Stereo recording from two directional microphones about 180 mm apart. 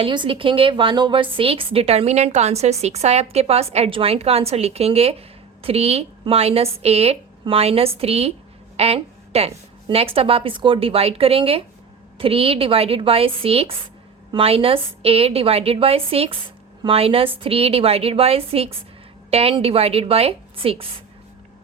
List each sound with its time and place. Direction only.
0.0 s a woman's voice: 25° right (ahead or behind)
8.7 s a sound: 35° right (ahead or behind)
9.9 s a woman's voice: 35° right (ahead or behind)